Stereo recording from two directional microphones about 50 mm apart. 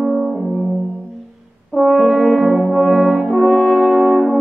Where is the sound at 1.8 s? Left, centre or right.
Centre.